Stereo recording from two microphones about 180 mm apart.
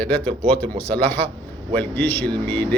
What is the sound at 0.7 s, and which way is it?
Speech, 60° right (ahead or behind).